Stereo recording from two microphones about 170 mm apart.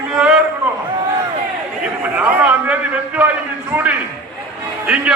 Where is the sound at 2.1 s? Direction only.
10° right (ahead or behind).